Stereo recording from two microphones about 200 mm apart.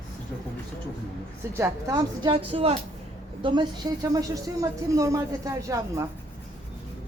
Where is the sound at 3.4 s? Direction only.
25° right (ahead or behind).